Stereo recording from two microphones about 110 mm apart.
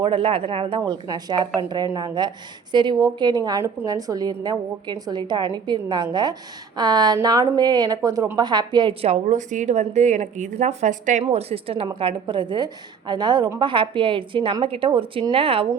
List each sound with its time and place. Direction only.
0.0 s a woman's voice: 55° right (ahead or behind)
0.9 s a woman's voice: 40° right (ahead or behind); by 15.6 s 60° right (ahead or behind)